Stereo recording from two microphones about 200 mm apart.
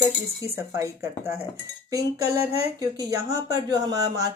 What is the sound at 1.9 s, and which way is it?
Speech, 15° right (ahead or behind).